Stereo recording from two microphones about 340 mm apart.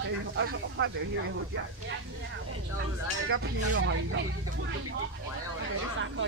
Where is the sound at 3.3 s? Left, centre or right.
Right.